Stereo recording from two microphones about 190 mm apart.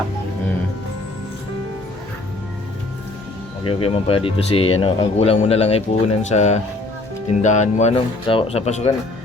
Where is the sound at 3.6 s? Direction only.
30° left (ahead or behind).